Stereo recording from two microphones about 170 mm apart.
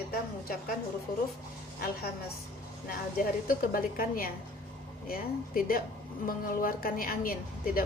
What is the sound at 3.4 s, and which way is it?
A woman's voice, 60° left (ahead or behind).